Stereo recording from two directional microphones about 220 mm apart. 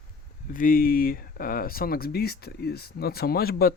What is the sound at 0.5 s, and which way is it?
Speech, 40° left (ahead or behind).